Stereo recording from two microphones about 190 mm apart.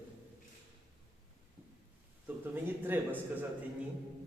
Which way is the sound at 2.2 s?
10° right (ahead or behind).